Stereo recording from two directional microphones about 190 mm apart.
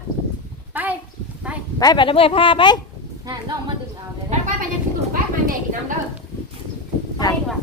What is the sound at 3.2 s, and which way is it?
Speech, 20° right (ahead or behind).